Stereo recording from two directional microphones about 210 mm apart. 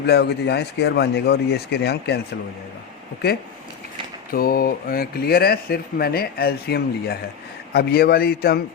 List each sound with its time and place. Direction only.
0.0 s speech: 50° left (ahead or behind)
4.3 s speech: 45° left (ahead or behind)